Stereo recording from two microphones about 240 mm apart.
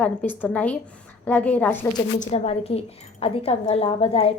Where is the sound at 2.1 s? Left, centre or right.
Left.